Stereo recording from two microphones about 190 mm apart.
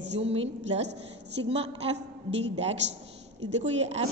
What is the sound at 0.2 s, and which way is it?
A woman's voice, 30° right (ahead or behind).